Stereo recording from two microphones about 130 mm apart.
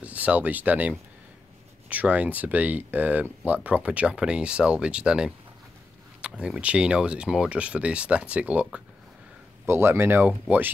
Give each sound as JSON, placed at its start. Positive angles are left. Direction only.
{"t": 0.0, "sound": "speech", "side_deg": -10}
{"t": 9.7, "sound": "speech", "side_deg": -20}